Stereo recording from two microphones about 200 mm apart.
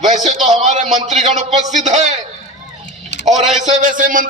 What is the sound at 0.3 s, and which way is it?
A man's voice, 35° right (ahead or behind).